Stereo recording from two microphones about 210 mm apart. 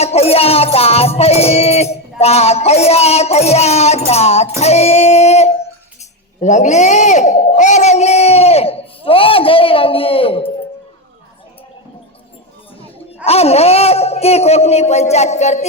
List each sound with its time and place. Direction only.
0.0 s music: 30° left (ahead or behind)
4.6 s singing: 30° left (ahead or behind)
6.4 s speech: 35° left (ahead or behind)
13.2 s a man's voice: 30° left (ahead or behind)